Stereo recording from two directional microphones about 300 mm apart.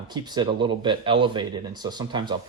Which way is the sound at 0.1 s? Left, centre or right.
Centre.